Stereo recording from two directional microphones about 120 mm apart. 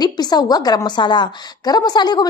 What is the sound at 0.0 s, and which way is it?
A woman's voice, 35° left (ahead or behind).